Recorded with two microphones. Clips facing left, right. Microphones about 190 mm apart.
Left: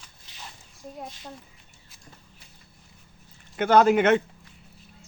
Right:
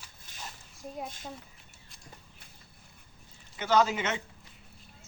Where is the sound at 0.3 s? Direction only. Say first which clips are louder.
Even; 50° right (ahead or behind).